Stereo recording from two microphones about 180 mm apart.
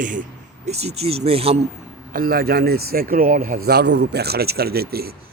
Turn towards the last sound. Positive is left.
turn(degrees=-60)  # may be behind; listen again after turning